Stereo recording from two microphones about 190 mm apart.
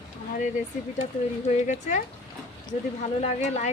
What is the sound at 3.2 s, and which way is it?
Speech, 35° left (ahead or behind).